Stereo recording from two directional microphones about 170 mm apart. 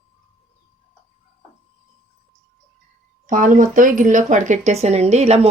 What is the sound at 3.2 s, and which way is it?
Speech, 50° right (ahead or behind).